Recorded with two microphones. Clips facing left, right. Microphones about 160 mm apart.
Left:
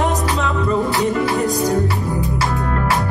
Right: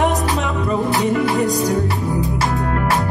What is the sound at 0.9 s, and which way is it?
Music, 20° right (ahead or behind).